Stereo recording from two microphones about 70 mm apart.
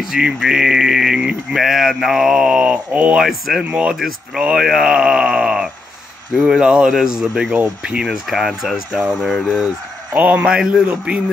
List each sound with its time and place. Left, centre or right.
0.0 s speech: centre
3.2 s speech: centre
3.6 s speech: centre
3.9 s speech: centre
10.1 s speech: right